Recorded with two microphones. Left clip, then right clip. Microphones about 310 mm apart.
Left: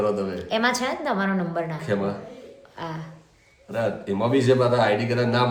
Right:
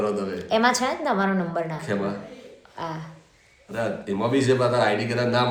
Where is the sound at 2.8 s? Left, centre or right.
Centre.